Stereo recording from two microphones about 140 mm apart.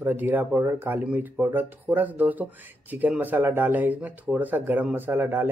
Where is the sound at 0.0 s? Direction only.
15° right (ahead or behind).